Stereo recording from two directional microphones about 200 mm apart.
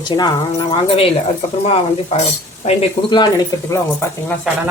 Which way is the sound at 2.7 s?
25° left (ahead or behind).